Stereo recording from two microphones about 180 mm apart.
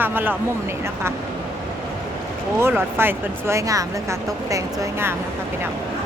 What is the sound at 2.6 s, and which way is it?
Speech, 15° right (ahead or behind).